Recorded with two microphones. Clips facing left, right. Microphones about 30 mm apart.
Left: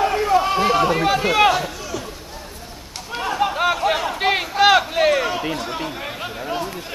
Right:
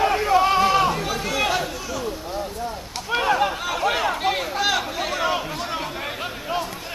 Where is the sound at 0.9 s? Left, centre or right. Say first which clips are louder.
Left 7 dB; left.